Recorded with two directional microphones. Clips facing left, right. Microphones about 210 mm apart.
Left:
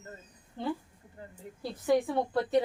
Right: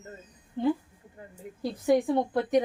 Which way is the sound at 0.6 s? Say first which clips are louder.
Right 7 dB; 15° right (ahead or behind).